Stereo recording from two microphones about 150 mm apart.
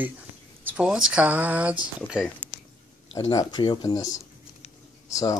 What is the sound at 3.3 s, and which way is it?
Speech, 30° left (ahead or behind).